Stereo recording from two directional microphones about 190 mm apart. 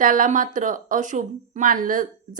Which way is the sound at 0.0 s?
45° right (ahead or behind).